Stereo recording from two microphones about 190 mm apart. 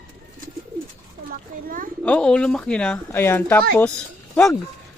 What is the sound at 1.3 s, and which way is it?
Speech, 50° right (ahead or behind).